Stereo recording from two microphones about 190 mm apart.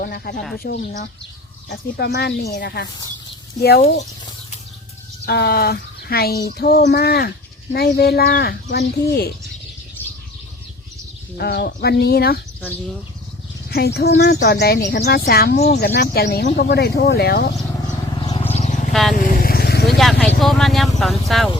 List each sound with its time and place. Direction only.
0.0 s speech: 55° left (ahead or behind)
1.7 s speech: 60° left (ahead or behind)
5.2 s speech: 60° left (ahead or behind)
11.3 s speech: 55° left (ahead or behind)
13.7 s speech: 60° left (ahead or behind)
15.5 s speech: 35° left (ahead or behind)
15.8 s speech: 55° left (ahead or behind)
18.2 s vehicle: 30° left (ahead or behind)
18.5 s vehicle: 40° left (ahead or behind)
20.0 s vehicle: 5° left (ahead or behind)
20.4 s speech: centre (ahead or behind)